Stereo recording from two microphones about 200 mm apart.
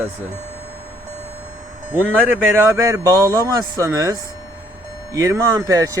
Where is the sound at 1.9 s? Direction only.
5° right (ahead or behind).